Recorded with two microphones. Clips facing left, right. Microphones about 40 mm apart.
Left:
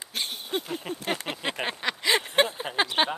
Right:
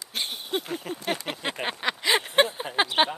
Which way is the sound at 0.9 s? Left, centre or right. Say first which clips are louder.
Even; left.